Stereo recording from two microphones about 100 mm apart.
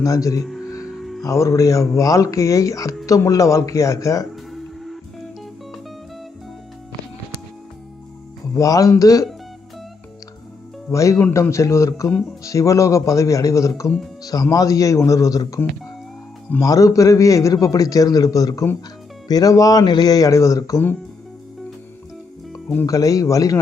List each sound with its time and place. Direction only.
0.0 s a man's voice: 35° left (ahead or behind)
0.4 s music: centre (ahead or behind)
1.2 s a man's voice: 35° left (ahead or behind)
4.3 s music: centre (ahead or behind)
8.5 s a man's voice: 35° left (ahead or behind)
10.9 s a man's voice: 30° left (ahead or behind)
22.9 s a man's voice: 35° left (ahead or behind)